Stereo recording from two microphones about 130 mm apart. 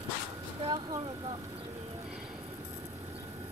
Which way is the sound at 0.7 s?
35° right (ahead or behind).